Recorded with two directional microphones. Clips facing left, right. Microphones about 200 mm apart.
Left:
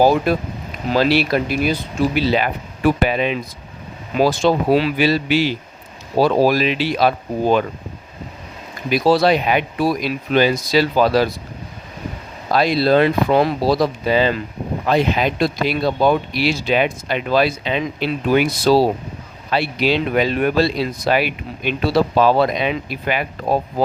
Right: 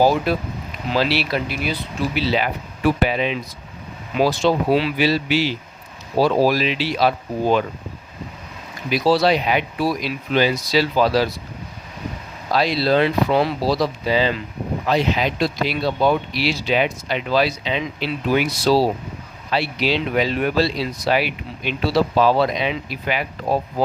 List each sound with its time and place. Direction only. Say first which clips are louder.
0.3 s speech: left 3 dB; 50° left (ahead or behind)
8.9 s speech: left 2 dB; 50° left (ahead or behind)
12.5 s speech: left 3 dB; 50° left (ahead or behind)